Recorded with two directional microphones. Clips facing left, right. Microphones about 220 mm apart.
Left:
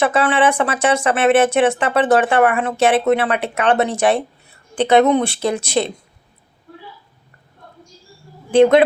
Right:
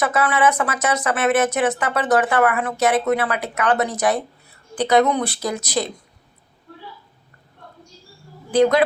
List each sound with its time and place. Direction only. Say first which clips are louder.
0.0 s speech: left 3 dB; 30° left (ahead or behind)
8.4 s speech: left 5 dB; 25° left (ahead or behind)